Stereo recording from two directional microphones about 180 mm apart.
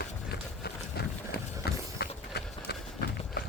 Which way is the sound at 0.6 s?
65° left (ahead or behind).